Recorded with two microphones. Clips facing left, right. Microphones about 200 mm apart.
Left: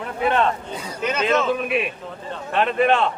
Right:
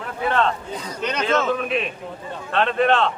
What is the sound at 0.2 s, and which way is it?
Speech, 15° left (ahead or behind).